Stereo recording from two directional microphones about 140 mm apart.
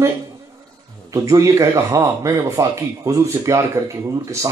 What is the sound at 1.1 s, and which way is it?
Speech, 25° right (ahead or behind).